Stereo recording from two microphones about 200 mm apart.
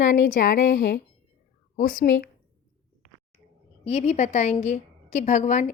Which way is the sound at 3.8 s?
30° left (ahead or behind).